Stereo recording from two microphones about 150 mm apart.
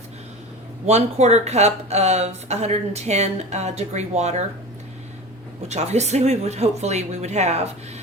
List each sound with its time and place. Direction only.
0.9 s speech: 45° right (ahead or behind)
5.6 s speech: 45° right (ahead or behind)